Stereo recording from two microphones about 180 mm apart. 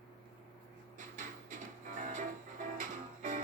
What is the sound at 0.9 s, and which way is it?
Music, 45° right (ahead or behind).